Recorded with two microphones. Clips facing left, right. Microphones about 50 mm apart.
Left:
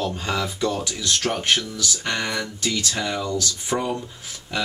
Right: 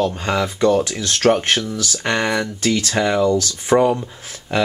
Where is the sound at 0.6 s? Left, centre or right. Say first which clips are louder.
Right 9 dB; right.